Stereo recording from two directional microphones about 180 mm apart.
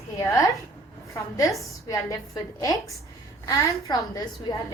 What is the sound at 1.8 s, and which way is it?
A woman's voice, 20° left (ahead or behind).